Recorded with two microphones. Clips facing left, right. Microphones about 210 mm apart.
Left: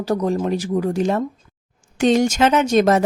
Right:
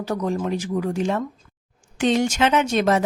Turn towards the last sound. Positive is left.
turn(degrees=40)  # may be behind; listen again after turning